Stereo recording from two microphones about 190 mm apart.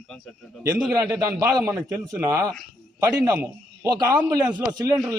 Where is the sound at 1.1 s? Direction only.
15° right (ahead or behind).